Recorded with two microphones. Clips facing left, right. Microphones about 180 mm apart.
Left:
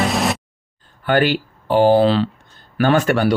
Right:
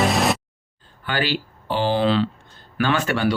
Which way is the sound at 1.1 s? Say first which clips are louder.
Left 8 dB; 55° left (ahead or behind).